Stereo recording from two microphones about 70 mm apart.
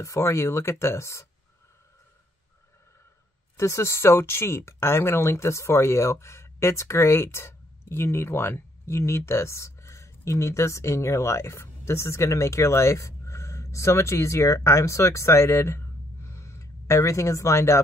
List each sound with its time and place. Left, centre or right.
0.0 s speech: left
3.5 s speech: left